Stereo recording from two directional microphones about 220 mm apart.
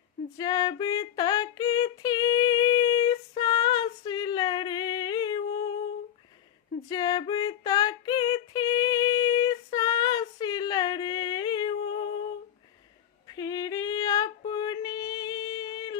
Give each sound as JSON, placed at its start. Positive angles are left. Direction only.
{"t": 0.3, "sound": "female singing", "side_deg": 15}
{"t": 6.8, "sound": "female singing", "side_deg": 15}
{"t": 13.2, "sound": "female singing", "side_deg": 15}